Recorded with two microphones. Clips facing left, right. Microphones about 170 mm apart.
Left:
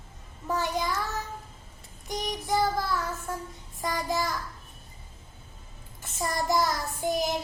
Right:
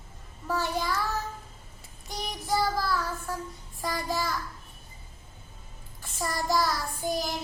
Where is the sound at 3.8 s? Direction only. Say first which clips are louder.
Left 1 dB; 20° left (ahead or behind).